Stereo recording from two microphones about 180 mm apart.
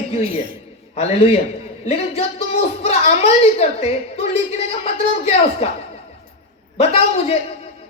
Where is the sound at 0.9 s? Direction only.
35° left (ahead or behind).